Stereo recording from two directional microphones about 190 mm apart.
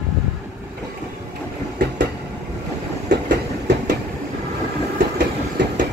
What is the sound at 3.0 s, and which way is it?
Train, 60° right (ahead or behind).